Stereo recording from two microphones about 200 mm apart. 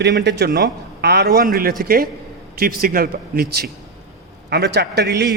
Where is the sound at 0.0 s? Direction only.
55° right (ahead or behind).